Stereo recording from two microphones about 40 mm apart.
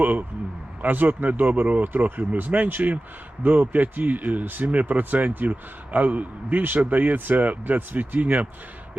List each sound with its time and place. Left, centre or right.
0.0 s a man's voice: right